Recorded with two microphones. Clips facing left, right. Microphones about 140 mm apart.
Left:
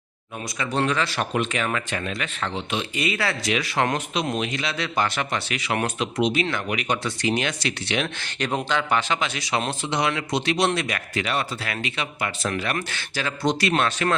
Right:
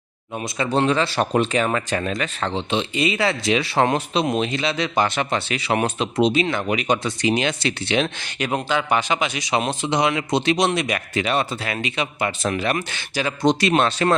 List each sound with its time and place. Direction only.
0.4 s speech: 30° right (ahead or behind)
8.2 s a man's voice: 10° right (ahead or behind); by 14.2 s 30° right (ahead or behind)